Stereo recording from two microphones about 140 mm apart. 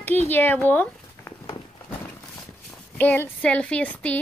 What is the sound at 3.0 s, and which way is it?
Speech, 15° left (ahead or behind).